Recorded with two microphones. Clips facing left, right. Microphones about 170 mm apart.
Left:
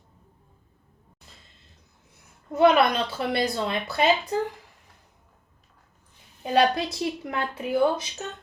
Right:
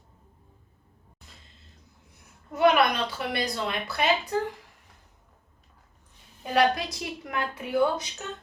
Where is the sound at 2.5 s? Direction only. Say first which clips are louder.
Left 3 dB; 30° left (ahead or behind).